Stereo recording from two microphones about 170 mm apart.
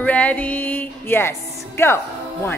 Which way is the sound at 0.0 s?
10° left (ahead or behind).